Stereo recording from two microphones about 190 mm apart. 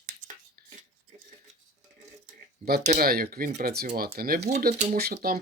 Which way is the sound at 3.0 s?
50° right (ahead or behind).